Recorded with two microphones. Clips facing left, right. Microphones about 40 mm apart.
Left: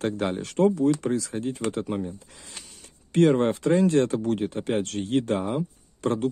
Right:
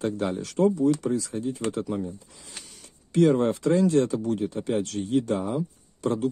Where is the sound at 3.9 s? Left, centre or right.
Left.